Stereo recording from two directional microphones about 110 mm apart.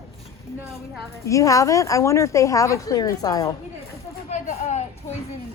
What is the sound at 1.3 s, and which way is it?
A woman's voice, 30° left (ahead or behind).